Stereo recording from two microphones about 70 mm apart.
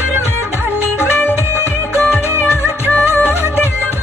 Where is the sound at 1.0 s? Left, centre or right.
Left.